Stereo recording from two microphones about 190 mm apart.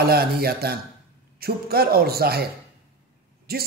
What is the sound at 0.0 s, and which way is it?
A man's voice, 55° right (ahead or behind).